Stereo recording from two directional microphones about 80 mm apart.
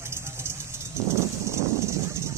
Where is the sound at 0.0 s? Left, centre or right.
Right.